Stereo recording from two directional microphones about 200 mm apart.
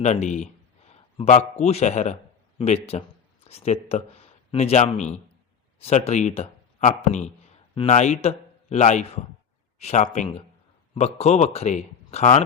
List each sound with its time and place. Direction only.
0.0 s a man's voice: 35° left (ahead or behind)